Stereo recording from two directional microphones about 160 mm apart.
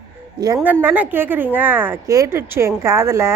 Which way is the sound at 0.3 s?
25° right (ahead or behind).